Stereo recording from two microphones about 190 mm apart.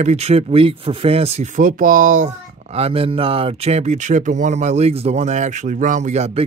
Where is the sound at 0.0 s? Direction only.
35° right (ahead or behind).